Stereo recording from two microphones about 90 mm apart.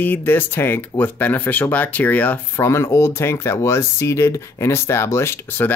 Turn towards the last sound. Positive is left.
turn(degrees=25)  # may be behind; listen again after turning